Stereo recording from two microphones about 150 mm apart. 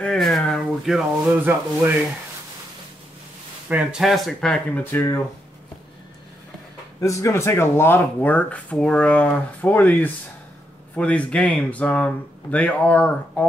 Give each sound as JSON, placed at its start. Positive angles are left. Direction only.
{"t": 0.0, "sound": "speech", "side_deg": 5}
{"t": 3.6, "sound": "speech", "side_deg": -5}
{"t": 4.9, "sound": "speech", "side_deg": 20}
{"t": 7.0, "sound": "speech", "side_deg": 20}